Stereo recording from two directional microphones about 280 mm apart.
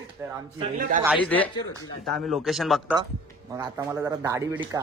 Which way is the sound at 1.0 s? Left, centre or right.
Centre.